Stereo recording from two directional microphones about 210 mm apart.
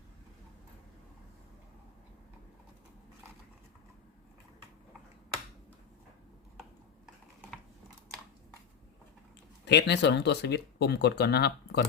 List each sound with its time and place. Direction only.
9.6 s speech: 55° left (ahead or behind)